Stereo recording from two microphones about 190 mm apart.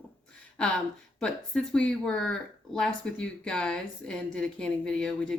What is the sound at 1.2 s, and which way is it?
Speech, 5° left (ahead or behind).